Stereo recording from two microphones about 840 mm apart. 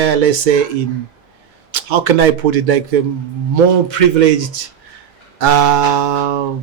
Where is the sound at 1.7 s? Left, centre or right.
Right.